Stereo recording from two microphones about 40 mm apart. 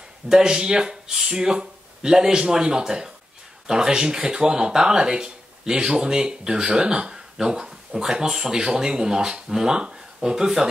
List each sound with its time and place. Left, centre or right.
0.3 s speech: centre